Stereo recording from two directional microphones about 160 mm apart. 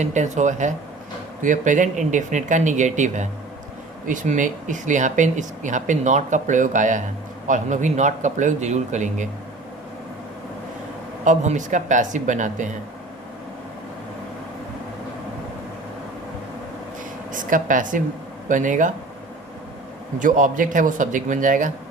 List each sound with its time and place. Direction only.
0.0 s speech: 50° right (ahead or behind)
11.3 s speech: 50° right (ahead or behind)
17.3 s speech: 55° right (ahead or behind)
20.1 s speech: 55° right (ahead or behind)